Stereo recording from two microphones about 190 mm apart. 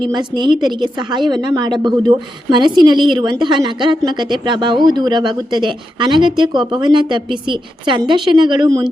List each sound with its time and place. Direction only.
0.1 s speech: 25° right (ahead or behind)